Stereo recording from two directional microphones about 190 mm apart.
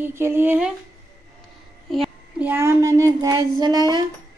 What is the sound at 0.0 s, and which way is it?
Speech, 15° right (ahead or behind).